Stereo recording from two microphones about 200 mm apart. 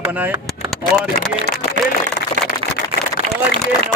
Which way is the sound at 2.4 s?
40° right (ahead or behind).